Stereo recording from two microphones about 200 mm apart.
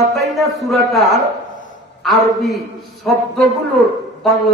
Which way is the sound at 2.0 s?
Centre (ahead or behind).